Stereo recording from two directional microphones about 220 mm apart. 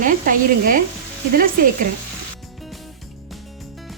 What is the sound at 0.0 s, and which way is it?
Speech, 40° right (ahead or behind).